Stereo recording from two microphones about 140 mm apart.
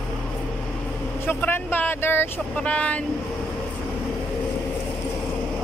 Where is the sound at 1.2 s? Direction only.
15° left (ahead or behind).